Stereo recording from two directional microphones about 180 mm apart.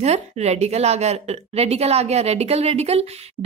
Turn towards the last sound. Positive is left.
turn(degrees=-35)  # may be behind; listen again after turning